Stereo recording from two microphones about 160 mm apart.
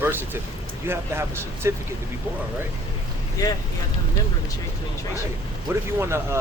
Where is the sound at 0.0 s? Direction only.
15° right (ahead or behind).